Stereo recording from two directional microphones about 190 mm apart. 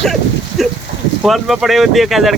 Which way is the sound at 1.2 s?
Centre (ahead or behind).